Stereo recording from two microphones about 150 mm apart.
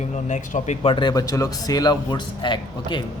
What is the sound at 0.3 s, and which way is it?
Speech, 50° left (ahead or behind).